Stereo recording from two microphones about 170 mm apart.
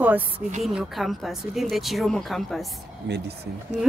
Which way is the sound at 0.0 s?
10° right (ahead or behind).